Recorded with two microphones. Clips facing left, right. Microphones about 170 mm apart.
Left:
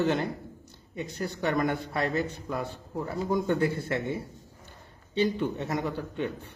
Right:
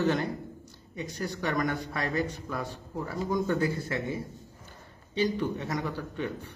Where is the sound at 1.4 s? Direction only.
20° left (ahead or behind).